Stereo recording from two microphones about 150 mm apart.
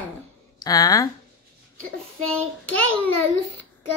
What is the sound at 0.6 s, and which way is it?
Speech, 25° left (ahead or behind).